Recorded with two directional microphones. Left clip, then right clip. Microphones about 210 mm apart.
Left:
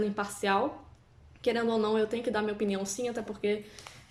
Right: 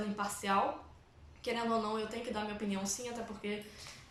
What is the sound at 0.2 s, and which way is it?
A woman's voice, 50° left (ahead or behind).